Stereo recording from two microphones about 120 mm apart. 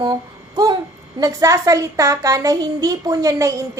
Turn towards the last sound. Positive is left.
turn(degrees=-30)  # may be behind; listen again after turning